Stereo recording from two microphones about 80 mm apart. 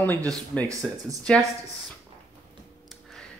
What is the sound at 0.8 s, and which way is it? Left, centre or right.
Speech, centre.